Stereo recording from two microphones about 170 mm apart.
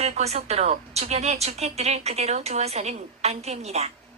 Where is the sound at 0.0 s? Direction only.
40° right (ahead or behind).